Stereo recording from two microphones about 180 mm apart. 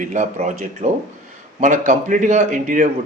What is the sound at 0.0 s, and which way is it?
A man's voice, 45° right (ahead or behind).